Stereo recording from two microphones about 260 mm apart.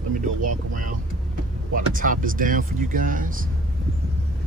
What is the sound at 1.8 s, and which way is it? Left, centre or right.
Speech, right.